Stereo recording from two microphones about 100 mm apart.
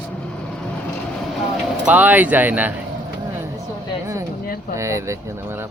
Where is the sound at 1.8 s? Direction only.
15° right (ahead or behind).